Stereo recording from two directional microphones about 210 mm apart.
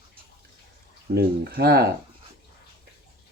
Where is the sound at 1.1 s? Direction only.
45° right (ahead or behind).